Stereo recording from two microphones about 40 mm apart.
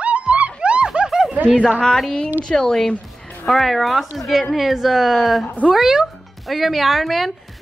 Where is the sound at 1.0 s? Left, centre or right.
Centre.